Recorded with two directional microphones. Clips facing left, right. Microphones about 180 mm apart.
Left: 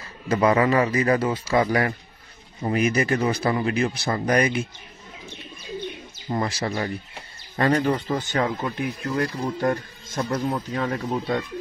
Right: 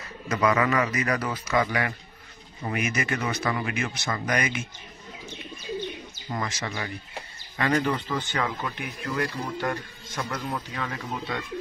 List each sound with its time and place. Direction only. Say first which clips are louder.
0.3 s a man's voice: left 4 dB; 30° left (ahead or behind)
6.2 s speech: left 6 dB; 30° left (ahead or behind)